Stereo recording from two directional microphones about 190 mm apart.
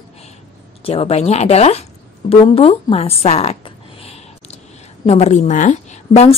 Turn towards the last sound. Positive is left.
turn(degrees=35)  # may be behind; listen again after turning